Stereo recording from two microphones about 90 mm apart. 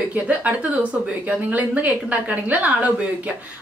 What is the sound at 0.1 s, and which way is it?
Speech, 15° right (ahead or behind).